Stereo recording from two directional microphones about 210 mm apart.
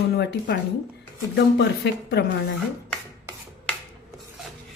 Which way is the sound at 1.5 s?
55° left (ahead or behind).